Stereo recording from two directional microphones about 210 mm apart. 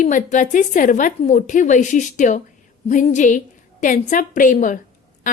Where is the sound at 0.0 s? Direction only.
35° left (ahead or behind).